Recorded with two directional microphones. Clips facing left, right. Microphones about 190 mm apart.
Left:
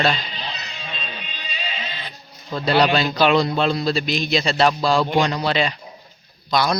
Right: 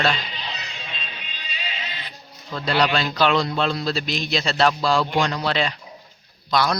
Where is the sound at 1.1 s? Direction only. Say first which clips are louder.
Left 4 dB; 30° left (ahead or behind).